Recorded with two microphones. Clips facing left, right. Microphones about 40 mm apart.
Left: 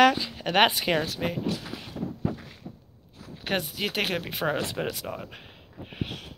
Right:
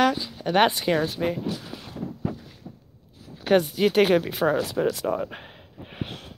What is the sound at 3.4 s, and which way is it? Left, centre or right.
Speech, centre.